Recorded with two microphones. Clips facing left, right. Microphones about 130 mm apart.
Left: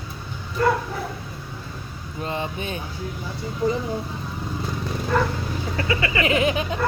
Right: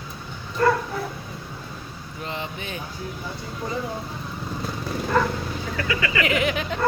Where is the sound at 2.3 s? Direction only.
20° left (ahead or behind).